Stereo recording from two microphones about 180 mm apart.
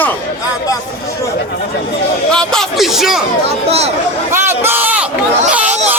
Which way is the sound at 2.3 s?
5° left (ahead or behind).